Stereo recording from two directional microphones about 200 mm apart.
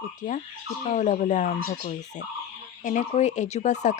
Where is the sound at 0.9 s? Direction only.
40° left (ahead or behind).